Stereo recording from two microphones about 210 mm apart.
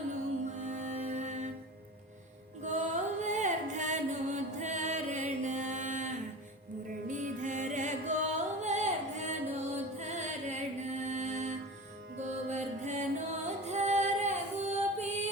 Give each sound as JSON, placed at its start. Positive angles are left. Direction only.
{"t": 0.6, "sound": "music", "side_deg": -35}
{"t": 2.6, "sound": "music", "side_deg": -35}
{"t": 13.7, "sound": "female singing", "side_deg": -30}